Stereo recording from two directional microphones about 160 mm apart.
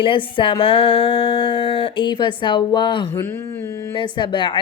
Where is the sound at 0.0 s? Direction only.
30° left (ahead or behind).